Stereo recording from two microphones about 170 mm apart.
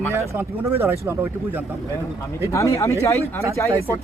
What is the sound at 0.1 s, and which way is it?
Speech, 15° right (ahead or behind).